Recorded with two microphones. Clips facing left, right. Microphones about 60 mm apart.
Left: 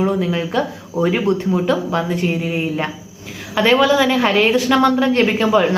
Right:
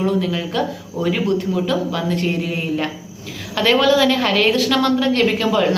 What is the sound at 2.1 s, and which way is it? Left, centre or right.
Speech, centre.